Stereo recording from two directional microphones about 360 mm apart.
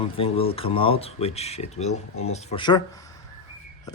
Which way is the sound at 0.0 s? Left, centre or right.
Centre.